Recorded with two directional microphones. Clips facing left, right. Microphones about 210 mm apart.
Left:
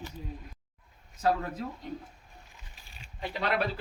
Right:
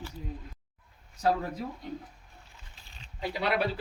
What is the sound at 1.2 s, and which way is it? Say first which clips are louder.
Speech: even; 15° right (ahead or behind).